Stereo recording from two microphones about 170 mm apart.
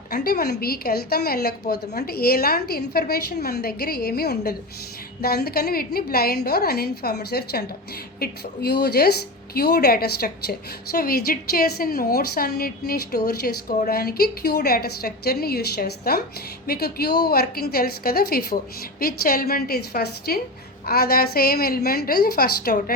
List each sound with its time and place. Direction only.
0.1 s a woman's voice: 65° left (ahead or behind)